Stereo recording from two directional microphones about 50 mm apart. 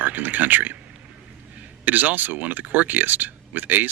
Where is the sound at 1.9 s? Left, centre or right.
Right.